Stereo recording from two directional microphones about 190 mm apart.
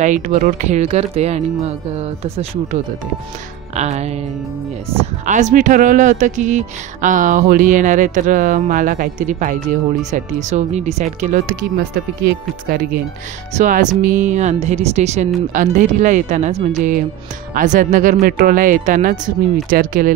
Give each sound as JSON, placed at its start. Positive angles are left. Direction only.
{"t": 0.0, "sound": "speech", "side_deg": -40}
{"t": 5.2, "sound": "speech", "side_deg": -40}